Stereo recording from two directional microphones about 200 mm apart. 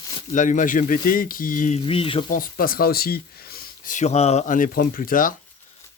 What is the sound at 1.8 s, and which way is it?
Speech, 25° left (ahead or behind).